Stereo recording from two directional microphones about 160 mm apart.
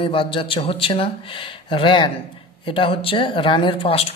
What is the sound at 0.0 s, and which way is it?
Speech, 35° left (ahead or behind).